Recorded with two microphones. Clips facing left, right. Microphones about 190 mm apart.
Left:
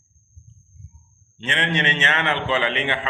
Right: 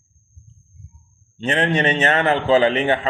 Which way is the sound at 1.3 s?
40° right (ahead or behind).